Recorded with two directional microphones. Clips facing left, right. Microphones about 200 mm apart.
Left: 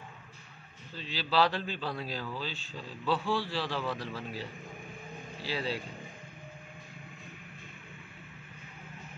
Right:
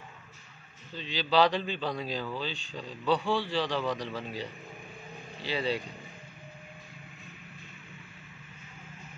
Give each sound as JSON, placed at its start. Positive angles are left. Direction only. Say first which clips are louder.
{"t": 0.9, "sound": "a man's voice", "louder": "right 3 dB", "side_deg": 5}